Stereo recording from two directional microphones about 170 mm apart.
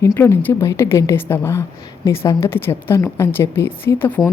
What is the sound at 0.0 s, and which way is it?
A woman's voice, 15° left (ahead or behind).